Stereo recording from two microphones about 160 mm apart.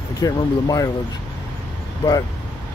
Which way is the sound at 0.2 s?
25° left (ahead or behind).